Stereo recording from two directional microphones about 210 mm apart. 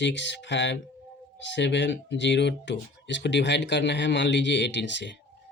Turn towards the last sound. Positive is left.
turn(degrees=55)  # may be behind; listen again after turning